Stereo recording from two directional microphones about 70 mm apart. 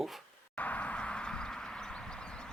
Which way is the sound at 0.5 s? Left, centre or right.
Left.